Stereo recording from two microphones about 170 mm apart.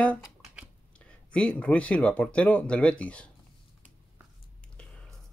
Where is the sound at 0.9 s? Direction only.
5° left (ahead or behind).